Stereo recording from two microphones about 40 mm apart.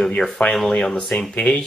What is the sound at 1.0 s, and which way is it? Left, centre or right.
Speech, centre.